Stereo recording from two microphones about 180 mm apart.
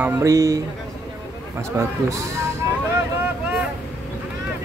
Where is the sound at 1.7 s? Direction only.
15° right (ahead or behind).